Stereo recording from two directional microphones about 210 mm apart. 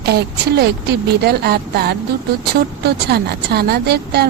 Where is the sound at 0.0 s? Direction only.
50° right (ahead or behind).